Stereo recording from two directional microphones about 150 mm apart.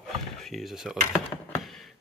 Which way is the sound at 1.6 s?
Centre (ahead or behind).